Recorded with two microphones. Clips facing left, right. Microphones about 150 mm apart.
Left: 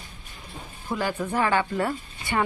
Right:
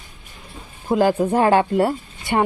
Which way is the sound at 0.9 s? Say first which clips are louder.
Right 10 dB; 40° right (ahead or behind).